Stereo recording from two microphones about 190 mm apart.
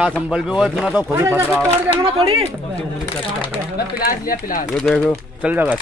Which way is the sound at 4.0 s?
50° left (ahead or behind).